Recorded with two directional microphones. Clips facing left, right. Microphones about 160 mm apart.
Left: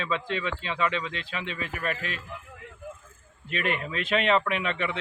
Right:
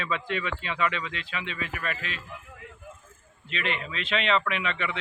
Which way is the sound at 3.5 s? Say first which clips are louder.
Left 3 dB; 45° left (ahead or behind).